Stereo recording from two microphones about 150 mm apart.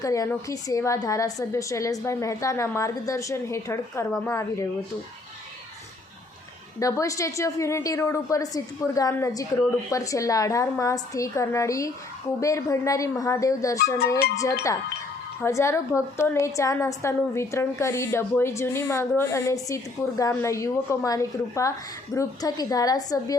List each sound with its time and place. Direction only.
0.0 s a woman's voice: 20° left (ahead or behind)
6.7 s a woman's voice: 20° left (ahead or behind)
15.4 s a woman's voice: 20° left (ahead or behind)